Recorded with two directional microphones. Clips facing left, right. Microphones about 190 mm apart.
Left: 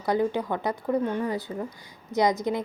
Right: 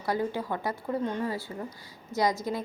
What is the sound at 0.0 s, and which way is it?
A woman's voice, 20° left (ahead or behind).